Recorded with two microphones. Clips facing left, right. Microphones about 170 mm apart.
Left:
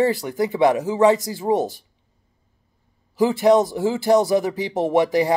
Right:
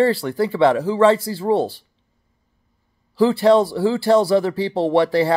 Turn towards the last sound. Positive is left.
turn(degrees=15)  # may be behind; listen again after turning